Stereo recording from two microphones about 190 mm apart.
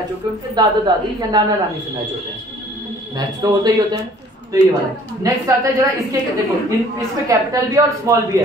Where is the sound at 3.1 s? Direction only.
20° right (ahead or behind).